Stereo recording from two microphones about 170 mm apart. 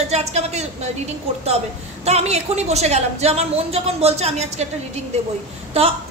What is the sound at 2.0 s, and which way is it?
A woman's voice, 40° right (ahead or behind).